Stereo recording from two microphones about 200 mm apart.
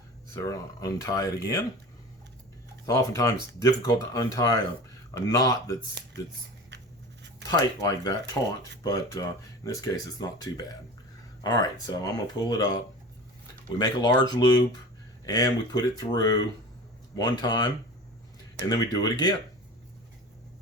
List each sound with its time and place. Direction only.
0.3 s speech: 15° left (ahead or behind)
2.8 s speech: 15° left (ahead or behind)
7.4 s speech: 20° left (ahead or behind)
13.7 s speech: 20° left (ahead or behind)